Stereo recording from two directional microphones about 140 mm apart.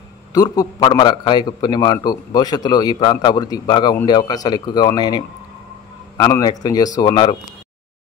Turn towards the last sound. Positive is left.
turn(degrees=30)  # may be behind; listen again after turning